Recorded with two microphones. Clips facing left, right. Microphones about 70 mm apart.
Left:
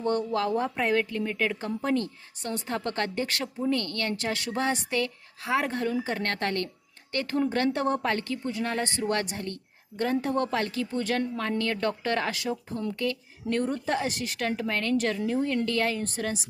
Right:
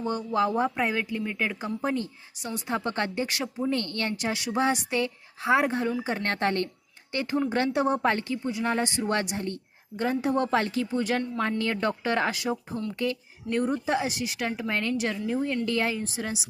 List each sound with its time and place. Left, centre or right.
0.0 s a woman's voice: centre
0.3 s a woman's voice: centre
13.5 s a woman's voice: centre
16.0 s a woman's voice: centre